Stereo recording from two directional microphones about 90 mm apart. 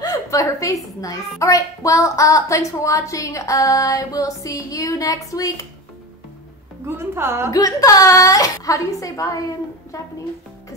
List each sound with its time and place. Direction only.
0.0 s a sound: 40° left (ahead or behind)
1.4 s a woman's voice: 35° left (ahead or behind)
7.0 s a woman's voice: 25° right (ahead or behind)
7.5 s a woman's voice: 40° left (ahead or behind)